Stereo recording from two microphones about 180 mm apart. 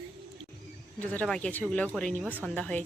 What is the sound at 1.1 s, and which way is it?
Speech, 5° left (ahead or behind).